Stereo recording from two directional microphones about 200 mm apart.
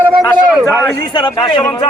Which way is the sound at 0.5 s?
5° right (ahead or behind).